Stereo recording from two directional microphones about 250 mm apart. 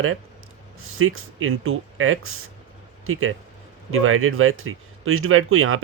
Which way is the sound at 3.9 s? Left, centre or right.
Right.